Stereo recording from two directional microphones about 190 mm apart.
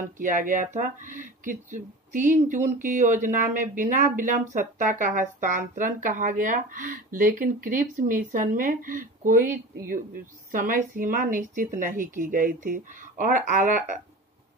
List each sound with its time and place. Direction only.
0.2 s speech: 45° right (ahead or behind)
10.5 s speech: 45° right (ahead or behind)